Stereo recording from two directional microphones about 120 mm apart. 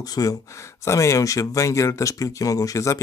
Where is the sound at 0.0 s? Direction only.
30° left (ahead or behind).